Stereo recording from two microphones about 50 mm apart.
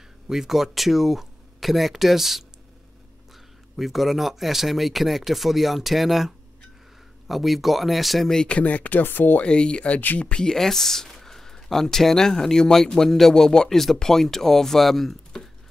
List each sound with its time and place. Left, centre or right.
0.3 s speech: centre
3.7 s speech: centre
8.5 s speech: left
9.0 s speech: left
9.4 s speech: centre